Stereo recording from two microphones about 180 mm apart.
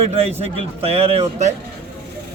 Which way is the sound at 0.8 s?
35° right (ahead or behind).